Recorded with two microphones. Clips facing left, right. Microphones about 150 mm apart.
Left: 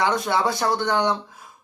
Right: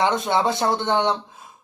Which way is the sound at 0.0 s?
20° right (ahead or behind).